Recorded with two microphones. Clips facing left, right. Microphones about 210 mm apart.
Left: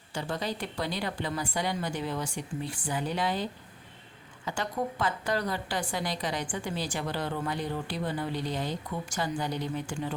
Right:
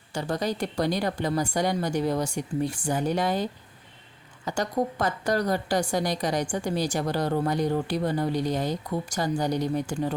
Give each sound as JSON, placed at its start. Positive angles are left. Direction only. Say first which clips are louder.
{"t": 0.1, "sound": "a woman's voice", "louder": "right 5 dB", "side_deg": -40}
{"t": 4.4, "sound": "a woman's voice", "louder": "right 5 dB", "side_deg": -40}